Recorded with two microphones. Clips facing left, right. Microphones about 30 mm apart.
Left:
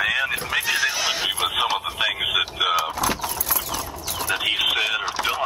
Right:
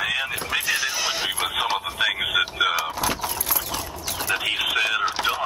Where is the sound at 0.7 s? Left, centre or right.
Centre.